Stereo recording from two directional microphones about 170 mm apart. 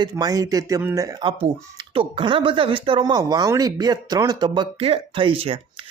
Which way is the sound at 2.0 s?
30° right (ahead or behind).